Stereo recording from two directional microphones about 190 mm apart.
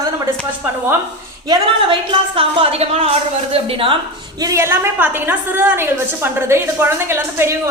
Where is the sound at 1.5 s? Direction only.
25° right (ahead or behind).